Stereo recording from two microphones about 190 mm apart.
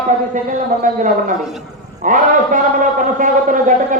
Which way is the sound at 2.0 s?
45° right (ahead or behind).